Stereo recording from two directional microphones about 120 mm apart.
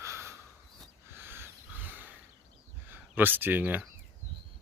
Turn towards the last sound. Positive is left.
turn(degrees=-15)  # may be behind; listen again after turning